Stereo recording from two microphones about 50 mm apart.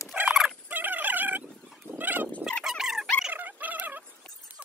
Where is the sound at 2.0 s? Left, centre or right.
Right.